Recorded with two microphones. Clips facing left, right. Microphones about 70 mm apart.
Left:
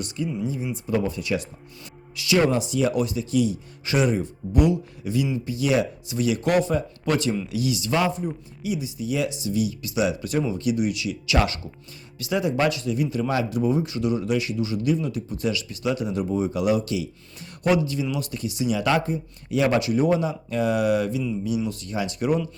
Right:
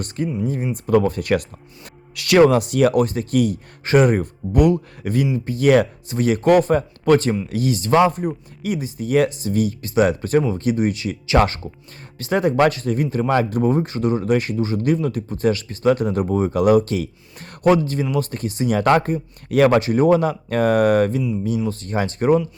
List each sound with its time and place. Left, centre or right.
0.4 s speech: right